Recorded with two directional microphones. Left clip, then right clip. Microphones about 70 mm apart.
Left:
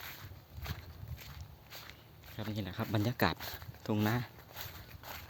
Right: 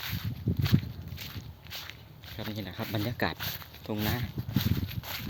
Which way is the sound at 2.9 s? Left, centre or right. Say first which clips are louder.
Right 1 dB; left.